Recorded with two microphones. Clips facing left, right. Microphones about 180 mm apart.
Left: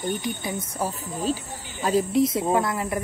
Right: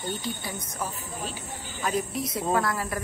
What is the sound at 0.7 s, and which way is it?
Speech, 35° left (ahead or behind).